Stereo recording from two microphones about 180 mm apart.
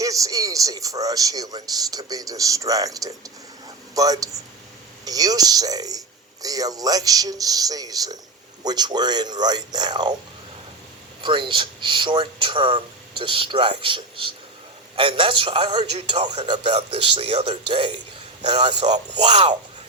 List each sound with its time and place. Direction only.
0.0 s speech: 20° right (ahead or behind)
11.2 s a man's voice: 25° right (ahead or behind)